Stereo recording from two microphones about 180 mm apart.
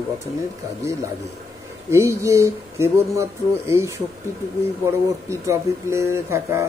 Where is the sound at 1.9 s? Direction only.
15° right (ahead or behind).